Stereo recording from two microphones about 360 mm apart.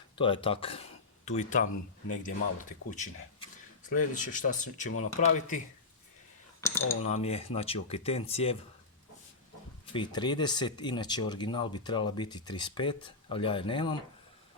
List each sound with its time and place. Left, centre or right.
0.2 s speech: centre
6.6 s speech: centre
7.0 s speech: centre
9.8 s speech: centre